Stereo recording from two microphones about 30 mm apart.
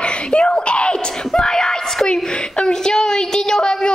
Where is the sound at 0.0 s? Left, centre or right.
Left.